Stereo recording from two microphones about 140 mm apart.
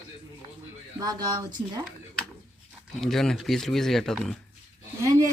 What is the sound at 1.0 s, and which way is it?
Speech, 30° right (ahead or behind).